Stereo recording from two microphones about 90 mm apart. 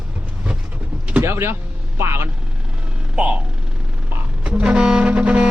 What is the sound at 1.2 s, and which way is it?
Speech, 30° right (ahead or behind).